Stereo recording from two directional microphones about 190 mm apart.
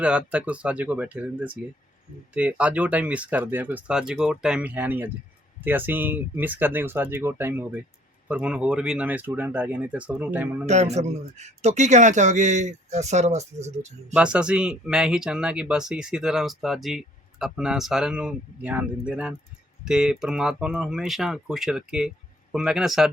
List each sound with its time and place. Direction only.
0.0 s speech: 5° right (ahead or behind)
10.7 s a man's voice: 35° right (ahead or behind)
14.2 s speech: 5° right (ahead or behind)